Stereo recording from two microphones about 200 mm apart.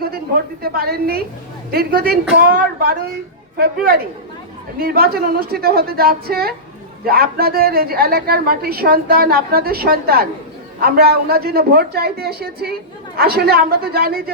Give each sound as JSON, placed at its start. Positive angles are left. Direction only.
{"t": 0.6, "sound": "a woman's voice", "side_deg": -50}